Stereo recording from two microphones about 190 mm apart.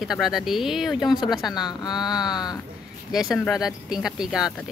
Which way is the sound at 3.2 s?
15° left (ahead or behind).